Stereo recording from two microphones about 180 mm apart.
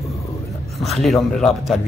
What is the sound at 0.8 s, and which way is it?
Speech, centre (ahead or behind).